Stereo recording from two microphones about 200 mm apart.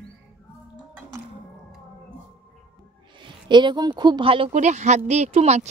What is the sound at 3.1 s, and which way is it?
A woman's voice, 25° right (ahead or behind).